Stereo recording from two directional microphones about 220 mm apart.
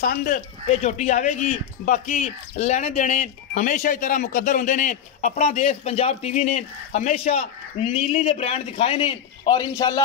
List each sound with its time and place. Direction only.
0.0 s speech: 35° left (ahead or behind)